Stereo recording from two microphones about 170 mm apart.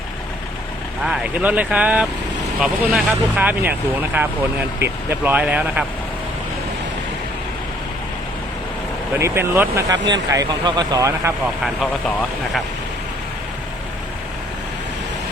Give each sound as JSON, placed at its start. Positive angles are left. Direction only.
{"t": 1.0, "sound": "speech", "side_deg": -5}
{"t": 9.1, "sound": "speech", "side_deg": -15}
{"t": 11.6, "sound": "speech", "side_deg": 0}